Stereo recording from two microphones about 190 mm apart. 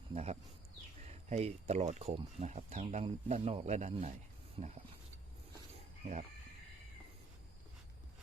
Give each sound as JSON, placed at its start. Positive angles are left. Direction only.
{"t": 0.1, "sound": "speech", "side_deg": -35}